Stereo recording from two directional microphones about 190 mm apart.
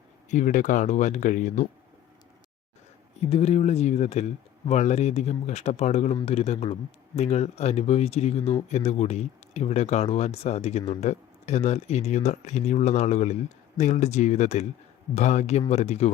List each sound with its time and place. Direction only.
0.3 s speech: 40° left (ahead or behind)
3.2 s speech: 30° left (ahead or behind)